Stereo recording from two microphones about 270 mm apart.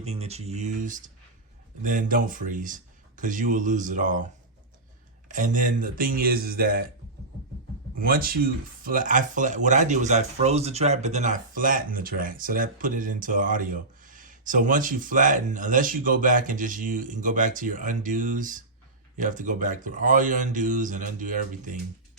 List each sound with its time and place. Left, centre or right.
0.0 s speech: right
5.3 s speech: right
7.9 s speech: right